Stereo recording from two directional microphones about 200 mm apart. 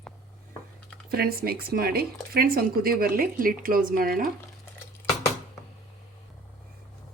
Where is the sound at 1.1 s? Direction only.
50° right (ahead or behind).